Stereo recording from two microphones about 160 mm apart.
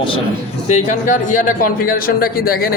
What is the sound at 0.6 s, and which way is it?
A man's voice, 45° left (ahead or behind).